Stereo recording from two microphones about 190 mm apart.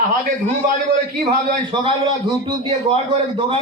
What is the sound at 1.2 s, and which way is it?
Speech, 25° right (ahead or behind).